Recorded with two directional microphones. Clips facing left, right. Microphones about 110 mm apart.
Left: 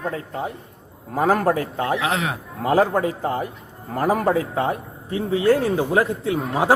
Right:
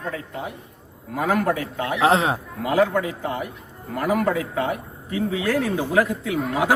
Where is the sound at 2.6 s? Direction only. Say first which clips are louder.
Left 2 dB; 40° left (ahead or behind).